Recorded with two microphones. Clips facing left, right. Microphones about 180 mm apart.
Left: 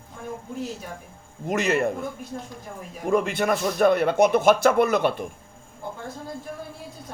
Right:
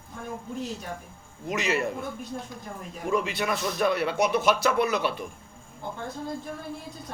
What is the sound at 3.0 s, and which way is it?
A man's voice, 50° left (ahead or behind).